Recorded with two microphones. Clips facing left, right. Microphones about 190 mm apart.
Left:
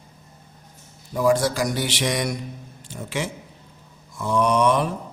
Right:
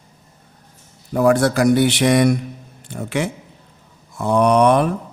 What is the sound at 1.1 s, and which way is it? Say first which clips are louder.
A man's voice: right 5 dB; 60° right (ahead or behind).